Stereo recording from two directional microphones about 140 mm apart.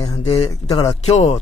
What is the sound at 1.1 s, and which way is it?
Speech, 45° left (ahead or behind).